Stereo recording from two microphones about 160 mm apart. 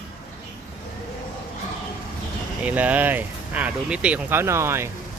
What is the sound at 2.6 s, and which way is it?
Speech, 10° right (ahead or behind).